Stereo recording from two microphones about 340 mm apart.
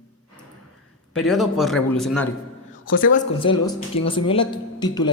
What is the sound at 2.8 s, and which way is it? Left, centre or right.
Speech, left.